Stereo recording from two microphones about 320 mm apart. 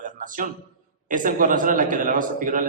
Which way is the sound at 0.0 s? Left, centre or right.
Right.